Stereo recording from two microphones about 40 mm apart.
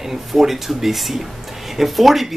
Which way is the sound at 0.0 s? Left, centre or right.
Centre.